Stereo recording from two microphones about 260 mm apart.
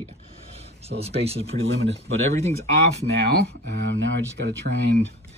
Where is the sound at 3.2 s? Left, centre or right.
Right.